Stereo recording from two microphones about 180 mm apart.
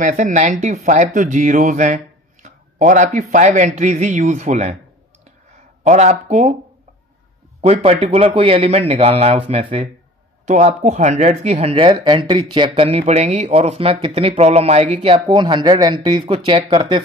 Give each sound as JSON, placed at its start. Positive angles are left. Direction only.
{"t": 0.0, "sound": "speech", "side_deg": -45}
{"t": 5.9, "sound": "speech", "side_deg": -40}
{"t": 7.6, "sound": "speech", "side_deg": -35}